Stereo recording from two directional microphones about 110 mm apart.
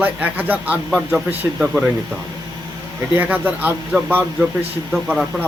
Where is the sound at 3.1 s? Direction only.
15° right (ahead or behind).